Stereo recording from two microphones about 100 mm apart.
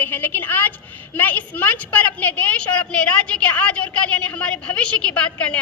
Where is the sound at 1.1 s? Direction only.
20° left (ahead or behind).